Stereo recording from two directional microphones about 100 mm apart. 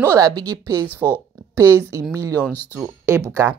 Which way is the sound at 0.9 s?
20° left (ahead or behind).